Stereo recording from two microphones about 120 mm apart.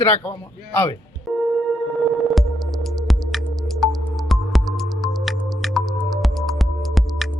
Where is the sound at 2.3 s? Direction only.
Centre (ahead or behind).